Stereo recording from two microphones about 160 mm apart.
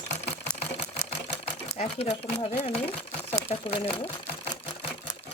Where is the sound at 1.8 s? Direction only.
40° left (ahead or behind).